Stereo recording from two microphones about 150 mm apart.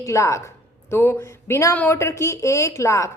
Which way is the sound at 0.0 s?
20° left (ahead or behind).